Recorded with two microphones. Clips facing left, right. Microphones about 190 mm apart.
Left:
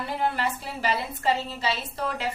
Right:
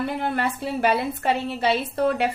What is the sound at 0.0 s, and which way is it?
A woman's voice, 60° right (ahead or behind).